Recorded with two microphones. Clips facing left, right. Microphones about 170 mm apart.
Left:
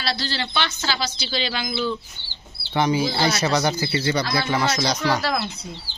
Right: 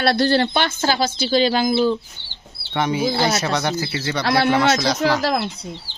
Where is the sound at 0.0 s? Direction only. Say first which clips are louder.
Right 11 dB; 55° right (ahead or behind); by 2.0 s 40° right (ahead or behind).